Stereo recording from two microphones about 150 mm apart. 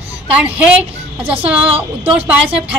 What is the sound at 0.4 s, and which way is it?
Speech, 10° right (ahead or behind).